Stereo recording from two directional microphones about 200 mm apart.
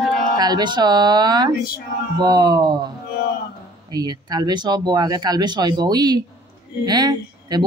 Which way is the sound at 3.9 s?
20° right (ahead or behind).